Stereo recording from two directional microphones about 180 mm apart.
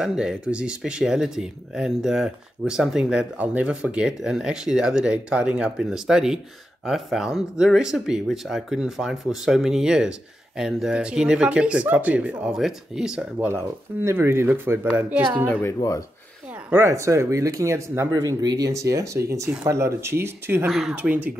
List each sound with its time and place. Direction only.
0.0 s speech: 5° right (ahead or behind)
15.4 s speech: 10° left (ahead or behind)
16.7 s speech: 15° right (ahead or behind)
20.6 s speech: centre (ahead or behind)